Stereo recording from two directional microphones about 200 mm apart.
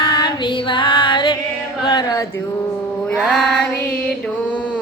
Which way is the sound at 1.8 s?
20° left (ahead or behind).